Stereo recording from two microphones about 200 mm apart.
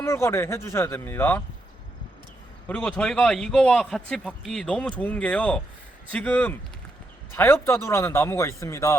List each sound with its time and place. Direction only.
0.0 s a man's voice: 15° left (ahead or behind)
2.6 s a man's voice: 5° left (ahead or behind)